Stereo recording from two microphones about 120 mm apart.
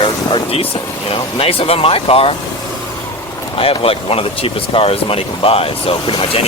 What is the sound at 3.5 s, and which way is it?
Speech, 50° left (ahead or behind).